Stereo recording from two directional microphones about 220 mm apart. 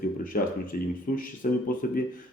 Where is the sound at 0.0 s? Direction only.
40° left (ahead or behind).